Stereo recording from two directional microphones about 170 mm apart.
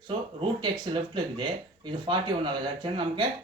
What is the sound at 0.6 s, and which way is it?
Speech, 25° right (ahead or behind).